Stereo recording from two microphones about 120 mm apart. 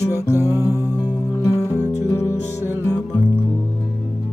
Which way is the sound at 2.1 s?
25° left (ahead or behind).